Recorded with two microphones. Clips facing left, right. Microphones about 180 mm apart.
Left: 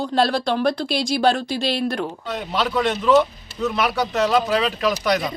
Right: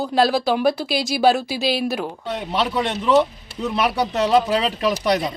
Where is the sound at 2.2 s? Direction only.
25° right (ahead or behind).